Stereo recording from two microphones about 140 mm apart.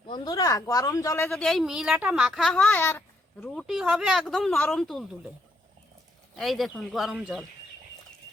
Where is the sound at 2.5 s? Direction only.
10° left (ahead or behind).